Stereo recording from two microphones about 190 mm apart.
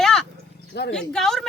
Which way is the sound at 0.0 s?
Centre (ahead or behind).